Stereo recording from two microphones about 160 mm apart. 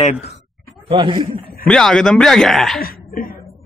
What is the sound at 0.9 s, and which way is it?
Speech, 35° right (ahead or behind).